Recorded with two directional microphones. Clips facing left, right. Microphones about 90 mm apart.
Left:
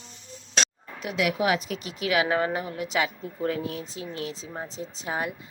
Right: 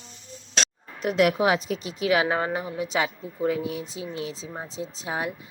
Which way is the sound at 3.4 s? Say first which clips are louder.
Right 3 dB; 15° right (ahead or behind).